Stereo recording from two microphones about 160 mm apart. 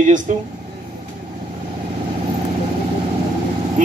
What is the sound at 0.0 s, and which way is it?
Speech, 50° right (ahead or behind).